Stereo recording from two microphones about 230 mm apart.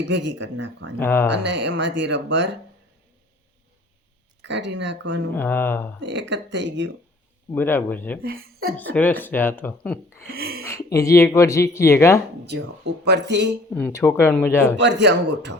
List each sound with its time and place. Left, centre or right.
0.0 s speech: right
0.9 s speech: centre
1.3 s speech: right
4.4 s speech: right
5.3 s speech: centre
6.0 s speech: right
7.5 s speech: centre
8.2 s speech: right
8.9 s speech: centre
12.5 s speech: right
13.7 s speech: centre
14.8 s speech: right